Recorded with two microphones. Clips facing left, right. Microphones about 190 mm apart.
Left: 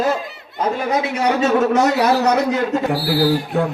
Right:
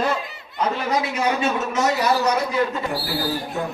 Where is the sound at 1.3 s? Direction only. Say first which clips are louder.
Left 7 dB; 65° left (ahead or behind).